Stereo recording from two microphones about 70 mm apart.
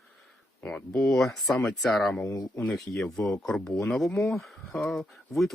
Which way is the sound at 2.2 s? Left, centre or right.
Left.